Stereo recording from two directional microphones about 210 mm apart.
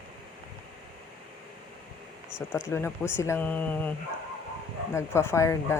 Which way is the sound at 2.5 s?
10° left (ahead or behind).